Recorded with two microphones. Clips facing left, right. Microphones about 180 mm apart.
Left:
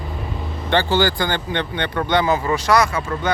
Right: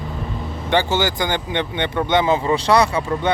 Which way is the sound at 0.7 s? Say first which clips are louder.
Left 1 dB; 15° right (ahead or behind).